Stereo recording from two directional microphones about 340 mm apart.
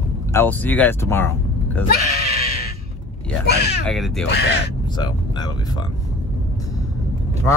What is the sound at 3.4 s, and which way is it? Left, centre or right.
Speech, left.